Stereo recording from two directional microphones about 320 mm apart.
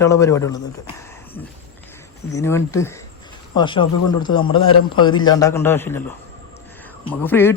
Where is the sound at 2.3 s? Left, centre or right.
Centre.